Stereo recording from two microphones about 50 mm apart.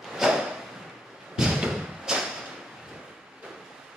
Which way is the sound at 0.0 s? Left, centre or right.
Centre.